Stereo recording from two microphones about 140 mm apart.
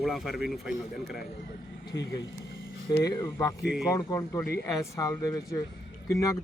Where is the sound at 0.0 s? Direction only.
Centre (ahead or behind).